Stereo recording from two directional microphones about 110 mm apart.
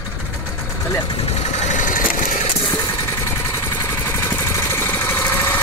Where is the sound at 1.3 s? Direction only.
90° left.